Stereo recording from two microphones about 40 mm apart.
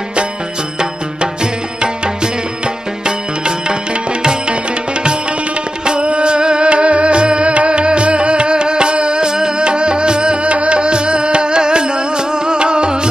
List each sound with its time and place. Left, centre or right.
0.7 s music: right
3.1 s music: right
5.9 s music: right